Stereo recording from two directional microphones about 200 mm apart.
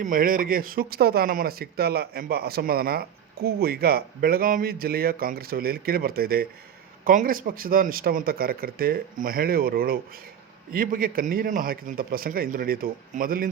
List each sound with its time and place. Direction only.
0.0 s speech: 45° right (ahead or behind)